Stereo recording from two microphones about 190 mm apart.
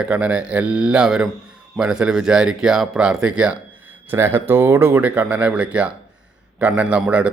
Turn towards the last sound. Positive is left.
turn(degrees=-5)  # may be behind; listen again after turning